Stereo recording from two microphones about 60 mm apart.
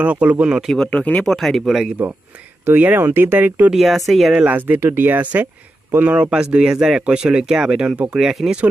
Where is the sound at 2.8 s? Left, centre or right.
Right.